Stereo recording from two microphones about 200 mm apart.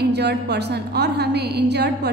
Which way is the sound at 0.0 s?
55° right (ahead or behind).